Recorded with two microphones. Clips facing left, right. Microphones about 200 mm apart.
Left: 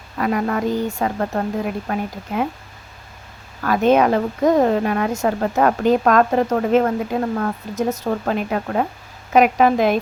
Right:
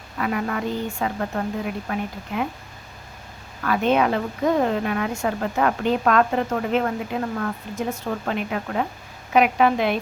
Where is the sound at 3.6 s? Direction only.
40° left (ahead or behind).